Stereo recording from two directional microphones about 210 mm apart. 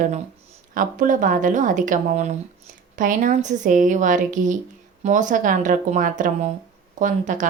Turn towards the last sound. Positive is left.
turn(degrees=-35)  # may be behind; listen again after turning